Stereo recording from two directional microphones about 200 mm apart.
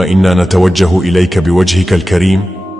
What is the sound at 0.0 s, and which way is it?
Speech, centre (ahead or behind).